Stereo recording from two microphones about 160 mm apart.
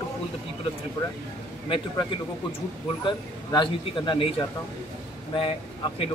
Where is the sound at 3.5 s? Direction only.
30° left (ahead or behind).